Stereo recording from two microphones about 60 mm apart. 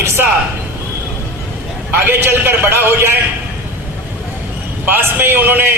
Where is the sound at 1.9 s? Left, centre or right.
Right.